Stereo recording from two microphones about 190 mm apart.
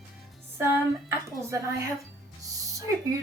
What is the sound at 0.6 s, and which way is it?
Speech, 10° right (ahead or behind).